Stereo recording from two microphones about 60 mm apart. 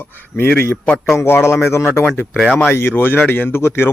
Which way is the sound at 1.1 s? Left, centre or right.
Left.